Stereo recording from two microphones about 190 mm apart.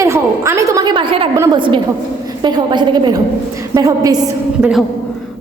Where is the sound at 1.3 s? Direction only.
15° right (ahead or behind).